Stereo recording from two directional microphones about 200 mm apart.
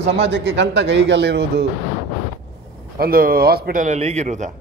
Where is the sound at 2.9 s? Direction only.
45° right (ahead or behind).